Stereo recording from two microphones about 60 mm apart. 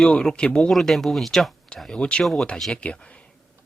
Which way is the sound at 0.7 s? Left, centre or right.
Centre.